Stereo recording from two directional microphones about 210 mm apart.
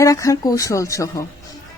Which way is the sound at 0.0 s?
15° left (ahead or behind).